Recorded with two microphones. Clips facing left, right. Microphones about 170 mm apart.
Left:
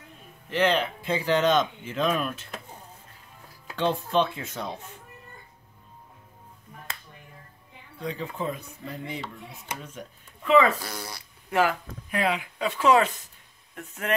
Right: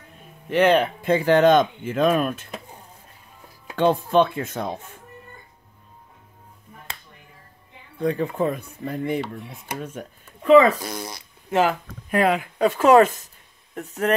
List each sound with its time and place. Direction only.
0.5 s speech: 55° right (ahead or behind)
3.7 s speech: 55° right (ahead or behind)
8.0 s speech: 55° right (ahead or behind)
10.4 s speech: 40° right (ahead or behind)
10.8 s speech: 20° right (ahead or behind)
12.1 s speech: 50° right (ahead or behind)